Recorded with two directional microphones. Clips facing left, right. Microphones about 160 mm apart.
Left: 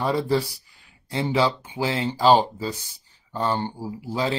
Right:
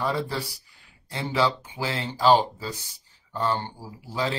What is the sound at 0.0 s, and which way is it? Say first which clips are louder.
Speech: left 5 dB; 20° left (ahead or behind).